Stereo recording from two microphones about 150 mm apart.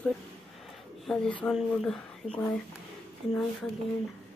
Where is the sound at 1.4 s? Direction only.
5° left (ahead or behind).